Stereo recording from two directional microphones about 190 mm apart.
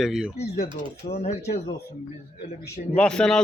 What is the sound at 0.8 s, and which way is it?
Speech, 35° left (ahead or behind).